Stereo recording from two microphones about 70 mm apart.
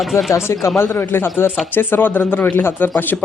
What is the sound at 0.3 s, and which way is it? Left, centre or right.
Speech, left.